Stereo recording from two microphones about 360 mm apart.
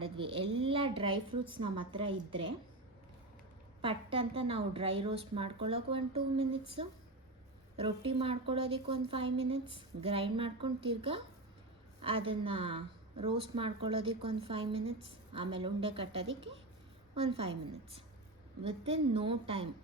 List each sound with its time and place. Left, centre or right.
0.0 s a sound: centre
0.5 s a woman's voice: centre
3.8 s a woman's voice: centre